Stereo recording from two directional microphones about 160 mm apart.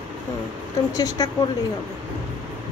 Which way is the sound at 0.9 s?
20° left (ahead or behind).